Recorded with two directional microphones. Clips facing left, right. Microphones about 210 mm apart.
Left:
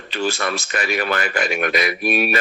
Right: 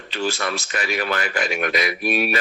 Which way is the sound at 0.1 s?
55° left (ahead or behind).